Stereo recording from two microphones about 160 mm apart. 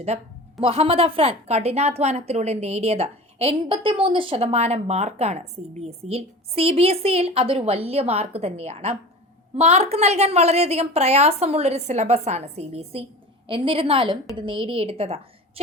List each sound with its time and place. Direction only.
0.1 s a woman's voice: 45° right (ahead or behind)